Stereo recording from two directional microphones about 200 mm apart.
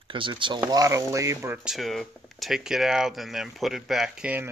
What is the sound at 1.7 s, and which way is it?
Speech, centre (ahead or behind).